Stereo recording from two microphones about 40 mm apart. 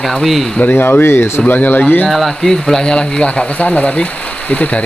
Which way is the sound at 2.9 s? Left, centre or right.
Left.